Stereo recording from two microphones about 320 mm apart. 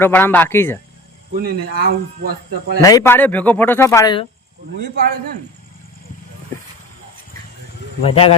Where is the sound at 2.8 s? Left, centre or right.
Centre.